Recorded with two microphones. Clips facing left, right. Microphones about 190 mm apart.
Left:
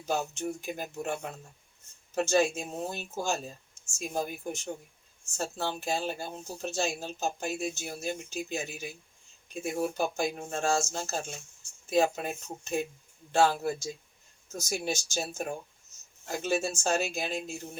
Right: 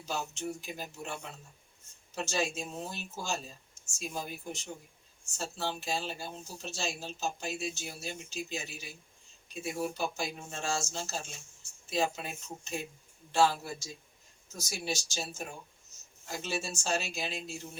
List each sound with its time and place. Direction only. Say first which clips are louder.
0.1 s speech: left 5 dB; 50° left (ahead or behind)
10.0 s speech: left 5 dB; 50° left (ahead or behind)